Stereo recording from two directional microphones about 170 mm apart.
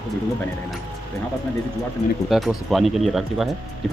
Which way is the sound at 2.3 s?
Centre (ahead or behind).